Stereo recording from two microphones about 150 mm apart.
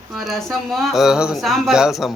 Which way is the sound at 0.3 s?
Centre (ahead or behind).